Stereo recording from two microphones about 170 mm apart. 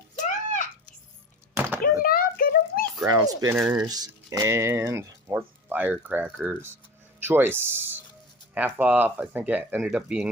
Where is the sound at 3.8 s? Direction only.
20° right (ahead or behind).